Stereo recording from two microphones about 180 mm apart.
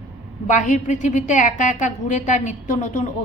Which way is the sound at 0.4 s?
45° left (ahead or behind).